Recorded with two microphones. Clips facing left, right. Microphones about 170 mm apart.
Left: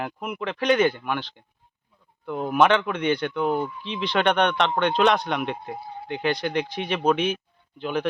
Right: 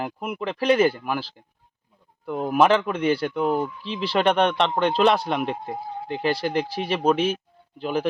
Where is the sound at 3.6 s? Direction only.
40° right (ahead or behind).